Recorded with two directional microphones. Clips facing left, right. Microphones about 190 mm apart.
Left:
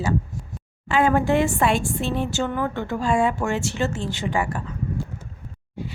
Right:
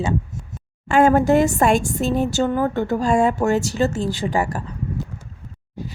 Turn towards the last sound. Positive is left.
turn(degrees=-40)  # may be behind; listen again after turning